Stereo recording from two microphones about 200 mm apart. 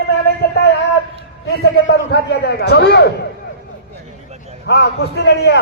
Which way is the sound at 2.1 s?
55° left (ahead or behind).